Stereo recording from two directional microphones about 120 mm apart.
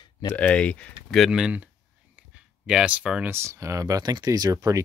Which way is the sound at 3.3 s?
25° right (ahead or behind).